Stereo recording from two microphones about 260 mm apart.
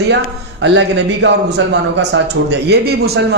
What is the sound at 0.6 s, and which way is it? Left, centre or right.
A man's voice, right.